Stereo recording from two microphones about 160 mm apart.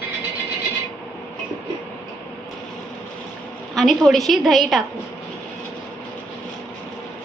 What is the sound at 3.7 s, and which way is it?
A woman's voice, centre (ahead or behind).